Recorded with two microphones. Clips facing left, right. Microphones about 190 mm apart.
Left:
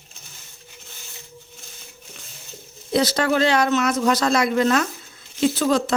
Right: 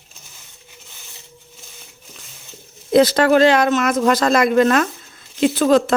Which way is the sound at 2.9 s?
55° right (ahead or behind).